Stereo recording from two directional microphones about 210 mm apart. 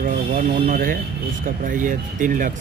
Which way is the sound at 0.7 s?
45° right (ahead or behind).